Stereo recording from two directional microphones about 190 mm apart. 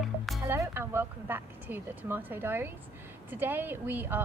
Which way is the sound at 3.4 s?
10° right (ahead or behind).